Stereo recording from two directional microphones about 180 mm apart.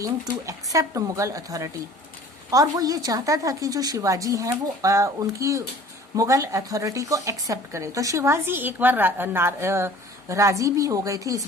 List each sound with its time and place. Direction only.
0.0 s a woman's voice: 20° right (ahead or behind)